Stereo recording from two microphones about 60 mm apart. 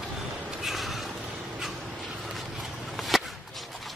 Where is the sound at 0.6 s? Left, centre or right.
Centre.